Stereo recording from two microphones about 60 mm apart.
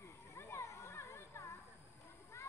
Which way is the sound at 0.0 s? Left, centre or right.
Left.